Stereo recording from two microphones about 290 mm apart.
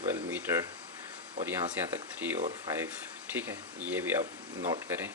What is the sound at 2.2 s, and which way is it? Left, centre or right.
Speech, centre.